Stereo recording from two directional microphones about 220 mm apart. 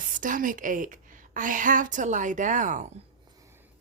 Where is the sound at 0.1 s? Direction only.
35° right (ahead or behind).